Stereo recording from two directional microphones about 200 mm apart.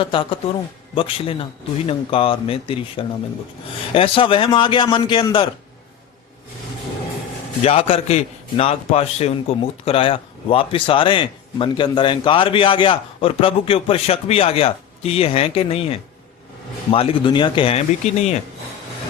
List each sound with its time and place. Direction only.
0.0 s a man's voice: 25° left (ahead or behind)
7.6 s a man's voice: 30° left (ahead or behind)